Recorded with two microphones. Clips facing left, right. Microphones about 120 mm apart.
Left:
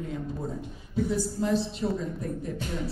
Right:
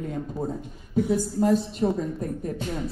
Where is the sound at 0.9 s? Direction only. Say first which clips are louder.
Right 4 dB; 50° right (ahead or behind).